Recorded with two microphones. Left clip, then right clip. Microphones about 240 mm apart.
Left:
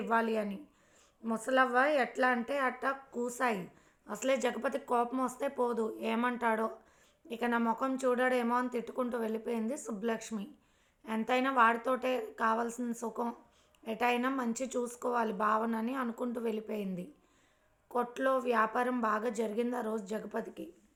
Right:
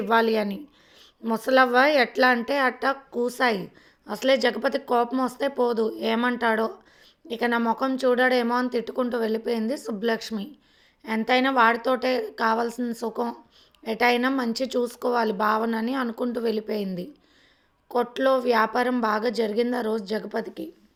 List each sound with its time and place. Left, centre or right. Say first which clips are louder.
0.0 s a woman's voice: right 10 dB; right